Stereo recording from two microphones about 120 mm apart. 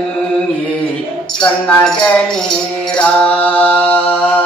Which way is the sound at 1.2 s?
5° left (ahead or behind).